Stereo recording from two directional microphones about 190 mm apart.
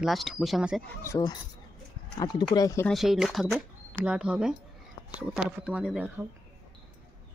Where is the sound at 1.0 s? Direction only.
20° left (ahead or behind).